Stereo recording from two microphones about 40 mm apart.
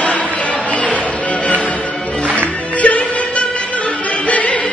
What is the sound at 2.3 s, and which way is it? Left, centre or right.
Music, left.